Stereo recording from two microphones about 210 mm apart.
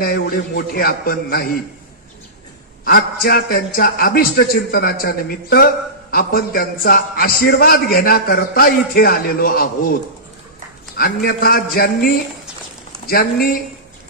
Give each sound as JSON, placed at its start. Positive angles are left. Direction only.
{"t": 0.0, "sound": "a man's voice", "side_deg": 45}
{"t": 2.8, "sound": "a man's voice", "side_deg": 45}
{"t": 11.2, "sound": "a man's voice", "side_deg": 45}